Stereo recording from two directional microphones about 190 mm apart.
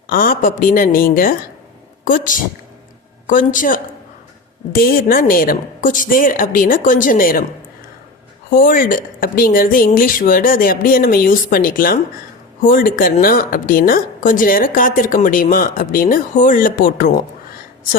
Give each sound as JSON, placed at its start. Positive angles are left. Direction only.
{"t": 0.1, "sound": "a woman's voice", "side_deg": 45}
{"t": 8.5, "sound": "a woman's voice", "side_deg": 45}